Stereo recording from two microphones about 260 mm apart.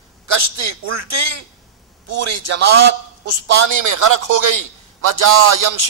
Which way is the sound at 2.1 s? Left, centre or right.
Right.